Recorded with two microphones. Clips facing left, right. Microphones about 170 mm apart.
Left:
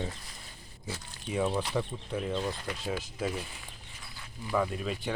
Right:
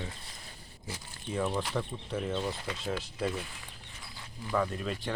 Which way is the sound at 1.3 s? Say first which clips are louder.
Left 2 dB; 10° left (ahead or behind).